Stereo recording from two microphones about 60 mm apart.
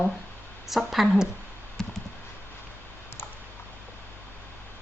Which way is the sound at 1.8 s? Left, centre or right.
Centre.